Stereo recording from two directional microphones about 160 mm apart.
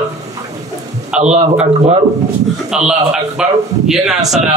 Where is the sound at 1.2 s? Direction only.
45° right (ahead or behind).